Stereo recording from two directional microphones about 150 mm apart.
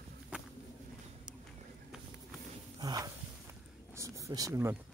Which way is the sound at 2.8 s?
25° right (ahead or behind).